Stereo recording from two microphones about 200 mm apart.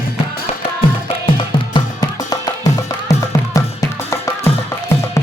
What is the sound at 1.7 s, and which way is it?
Music, 20° left (ahead or behind).